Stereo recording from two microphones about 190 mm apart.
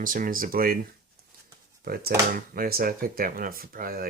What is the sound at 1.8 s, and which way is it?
Speech, 55° right (ahead or behind).